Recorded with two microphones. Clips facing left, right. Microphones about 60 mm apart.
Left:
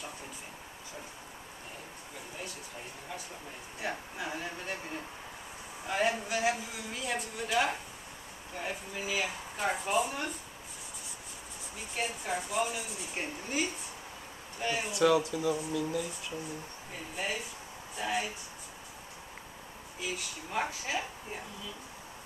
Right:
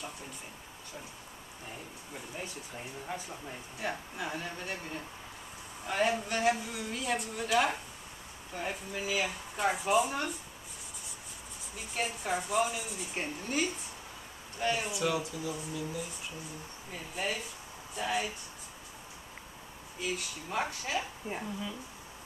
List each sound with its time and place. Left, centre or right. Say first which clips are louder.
3.8 s speech: even; centre
11.9 s speech: right 1 dB; centre
15.0 s speech: left 6 dB; left
16.9 s speech: right 1 dB; centre
20.0 s speech: right 2 dB; centre